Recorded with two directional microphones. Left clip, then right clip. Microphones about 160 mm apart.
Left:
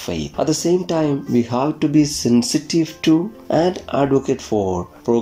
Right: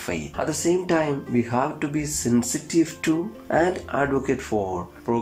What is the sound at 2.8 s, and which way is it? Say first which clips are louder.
Speech: left 6 dB; 25° left (ahead or behind).